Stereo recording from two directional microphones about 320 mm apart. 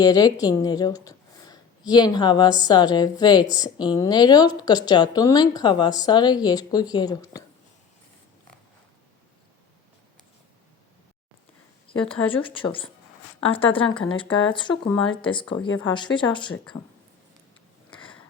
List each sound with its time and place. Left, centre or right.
0.0 s a woman's voice: centre
12.3 s speech: centre
17.9 s a sound: centre